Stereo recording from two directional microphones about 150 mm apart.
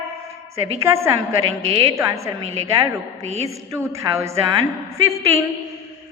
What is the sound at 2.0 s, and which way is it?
A woman's voice, 20° right (ahead or behind).